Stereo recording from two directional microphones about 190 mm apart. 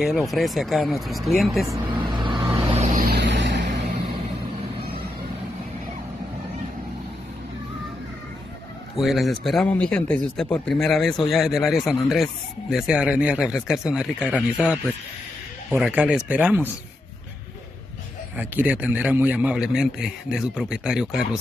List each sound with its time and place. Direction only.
0.0 s speech: centre (ahead or behind)
1.7 s vehicle: 20° right (ahead or behind)
2.7 s vehicle: 40° right (ahead or behind); by 3.9 s 65° right (ahead or behind)
8.9 s speech: centre (ahead or behind)
18.3 s speech: 10° right (ahead or behind)